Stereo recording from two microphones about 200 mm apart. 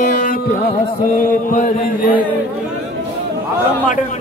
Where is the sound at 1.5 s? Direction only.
40° left (ahead or behind).